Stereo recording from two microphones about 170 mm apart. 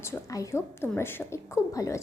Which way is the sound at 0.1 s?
15° left (ahead or behind).